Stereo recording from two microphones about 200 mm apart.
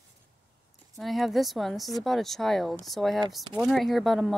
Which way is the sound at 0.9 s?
Centre (ahead or behind).